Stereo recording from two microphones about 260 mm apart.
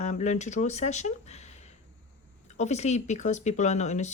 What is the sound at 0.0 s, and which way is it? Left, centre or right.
Speech, left.